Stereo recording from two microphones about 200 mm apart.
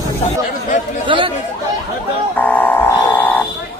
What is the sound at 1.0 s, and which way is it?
Speech, 25° right (ahead or behind).